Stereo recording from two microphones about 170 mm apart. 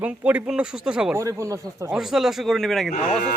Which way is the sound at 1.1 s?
15° right (ahead or behind).